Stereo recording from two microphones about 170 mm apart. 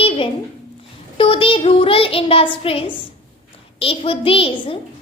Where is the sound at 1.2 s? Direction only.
30° left (ahead or behind).